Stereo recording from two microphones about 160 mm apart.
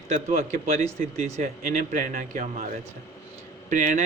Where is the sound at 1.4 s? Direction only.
60° right (ahead or behind).